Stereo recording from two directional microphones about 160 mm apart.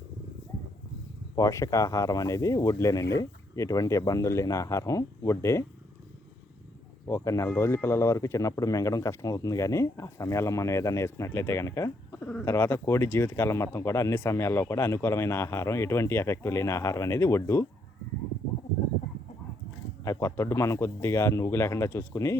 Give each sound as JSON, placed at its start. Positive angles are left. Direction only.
{"t": 1.4, "sound": "speech", "side_deg": 20}
{"t": 7.1, "sound": "speech", "side_deg": 15}
{"t": 20.1, "sound": "speech", "side_deg": 20}